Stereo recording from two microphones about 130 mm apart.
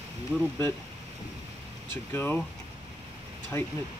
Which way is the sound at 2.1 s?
15° left (ahead or behind).